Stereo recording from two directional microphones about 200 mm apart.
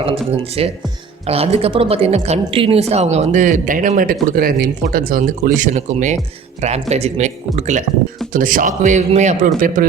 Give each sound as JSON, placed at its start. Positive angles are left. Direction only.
{"t": 0.3, "sound": "speech", "side_deg": -30}